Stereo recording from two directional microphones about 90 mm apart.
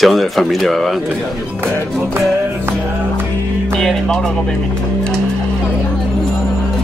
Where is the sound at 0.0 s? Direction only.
Centre (ahead or behind).